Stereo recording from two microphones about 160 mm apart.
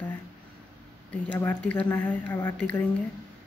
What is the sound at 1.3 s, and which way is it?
Speech, 10° left (ahead or behind).